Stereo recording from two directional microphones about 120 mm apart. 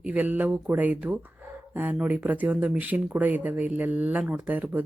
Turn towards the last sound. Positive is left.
turn(degrees=-15)  # may be behind; listen again after turning